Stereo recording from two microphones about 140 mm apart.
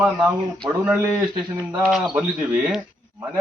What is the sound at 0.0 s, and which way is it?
Speech, 10° right (ahead or behind).